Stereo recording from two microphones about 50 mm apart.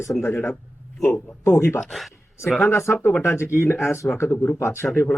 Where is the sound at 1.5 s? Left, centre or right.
Left.